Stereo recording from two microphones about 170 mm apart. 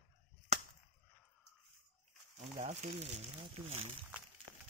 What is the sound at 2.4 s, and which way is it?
Speech, 40° right (ahead or behind).